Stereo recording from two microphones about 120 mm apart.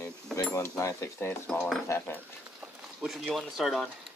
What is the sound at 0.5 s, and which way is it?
Cutlery, 25° left (ahead or behind).